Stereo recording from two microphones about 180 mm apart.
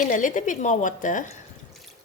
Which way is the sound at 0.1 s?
45° left (ahead or behind).